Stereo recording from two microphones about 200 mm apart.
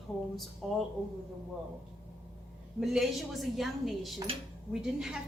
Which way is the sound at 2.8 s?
Centre (ahead or behind).